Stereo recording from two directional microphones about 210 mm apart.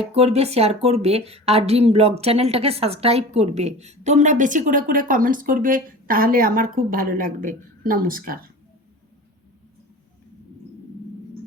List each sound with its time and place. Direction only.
0.0 s speech: 30° right (ahead or behind)